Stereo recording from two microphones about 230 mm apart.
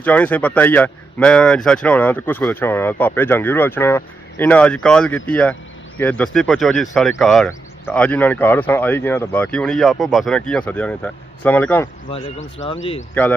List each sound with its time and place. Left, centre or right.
0.0 s speech: centre
12.6 s speech: left